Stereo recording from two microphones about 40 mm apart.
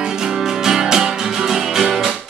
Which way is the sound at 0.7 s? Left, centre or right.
Centre.